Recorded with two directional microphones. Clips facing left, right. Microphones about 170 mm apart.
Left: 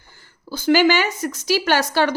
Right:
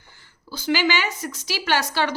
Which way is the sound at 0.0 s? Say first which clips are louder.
Left 5 dB; 40° left (ahead or behind).